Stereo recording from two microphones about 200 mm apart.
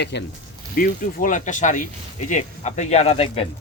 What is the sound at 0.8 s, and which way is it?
Speech, 40° left (ahead or behind).